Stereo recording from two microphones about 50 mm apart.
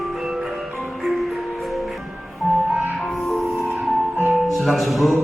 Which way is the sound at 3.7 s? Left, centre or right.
Right.